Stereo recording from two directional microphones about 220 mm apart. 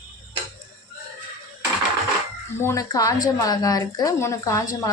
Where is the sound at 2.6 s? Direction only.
15° left (ahead or behind).